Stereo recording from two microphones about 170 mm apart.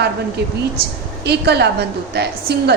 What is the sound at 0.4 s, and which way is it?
A woman's voice, 75° right (ahead or behind).